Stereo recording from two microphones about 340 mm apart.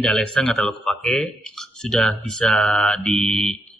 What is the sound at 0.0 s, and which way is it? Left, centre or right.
Speech, centre.